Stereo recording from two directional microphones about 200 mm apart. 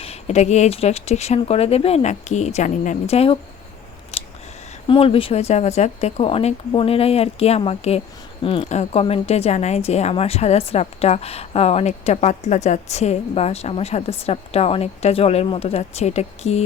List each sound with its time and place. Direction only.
0.0 s a woman's voice: 30° left (ahead or behind)
4.1 s scissors: 30° left (ahead or behind)
4.9 s a woman's voice: 25° left (ahead or behind)